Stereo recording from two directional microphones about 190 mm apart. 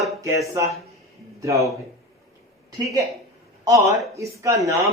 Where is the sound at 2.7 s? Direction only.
20° right (ahead or behind).